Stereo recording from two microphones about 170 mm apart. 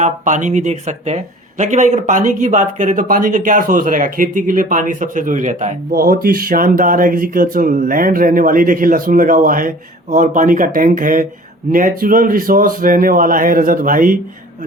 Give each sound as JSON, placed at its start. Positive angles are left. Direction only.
{"t": 0.0, "sound": "speech", "side_deg": -45}